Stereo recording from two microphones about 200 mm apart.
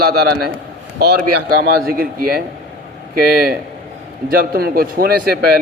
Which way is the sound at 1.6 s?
50° right (ahead or behind).